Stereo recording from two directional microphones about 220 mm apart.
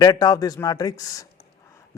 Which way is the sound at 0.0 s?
15° left (ahead or behind).